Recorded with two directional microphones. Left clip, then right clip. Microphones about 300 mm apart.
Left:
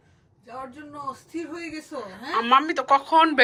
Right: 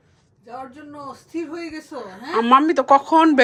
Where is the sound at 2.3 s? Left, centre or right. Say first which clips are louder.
Right 5 dB; centre.